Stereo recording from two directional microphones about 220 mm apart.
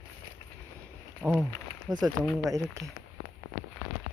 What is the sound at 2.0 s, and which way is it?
Speech, centre (ahead or behind).